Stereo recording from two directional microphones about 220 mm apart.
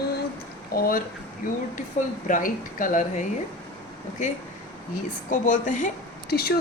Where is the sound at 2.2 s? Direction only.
40° left (ahead or behind).